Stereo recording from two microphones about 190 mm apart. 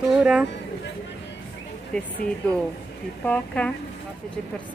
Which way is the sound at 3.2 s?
5° left (ahead or behind).